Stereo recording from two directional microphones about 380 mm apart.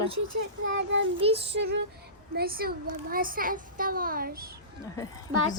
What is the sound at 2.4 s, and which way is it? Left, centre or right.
A child's voice, right.